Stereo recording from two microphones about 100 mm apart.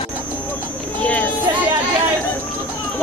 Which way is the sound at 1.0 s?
15° left (ahead or behind).